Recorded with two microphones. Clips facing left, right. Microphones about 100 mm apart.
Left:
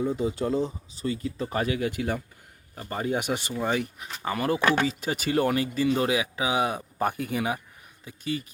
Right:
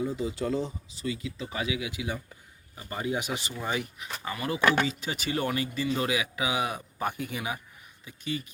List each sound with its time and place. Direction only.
0.0 s speech: 30° left (ahead or behind)